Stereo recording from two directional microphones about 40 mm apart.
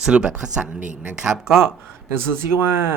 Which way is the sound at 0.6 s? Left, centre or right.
Right.